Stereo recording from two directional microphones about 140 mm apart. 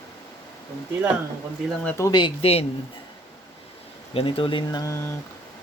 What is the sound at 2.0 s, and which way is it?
Speech, 30° left (ahead or behind).